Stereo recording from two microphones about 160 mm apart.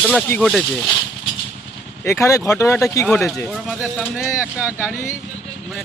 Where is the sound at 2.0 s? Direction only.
20° left (ahead or behind).